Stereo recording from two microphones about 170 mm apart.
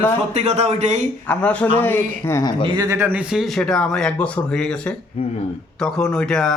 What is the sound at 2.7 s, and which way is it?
Speech, 20° right (ahead or behind).